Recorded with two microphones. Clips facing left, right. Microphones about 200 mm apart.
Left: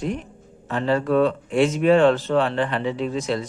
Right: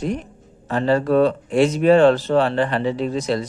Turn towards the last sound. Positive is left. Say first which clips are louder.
# right 3 dB
turn(degrees=-40)  # may be behind; listen again after turning